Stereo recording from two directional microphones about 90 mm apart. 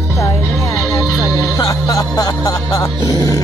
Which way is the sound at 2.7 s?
45° left (ahead or behind).